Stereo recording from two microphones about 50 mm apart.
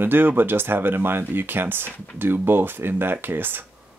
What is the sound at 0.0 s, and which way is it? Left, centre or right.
Speech, right.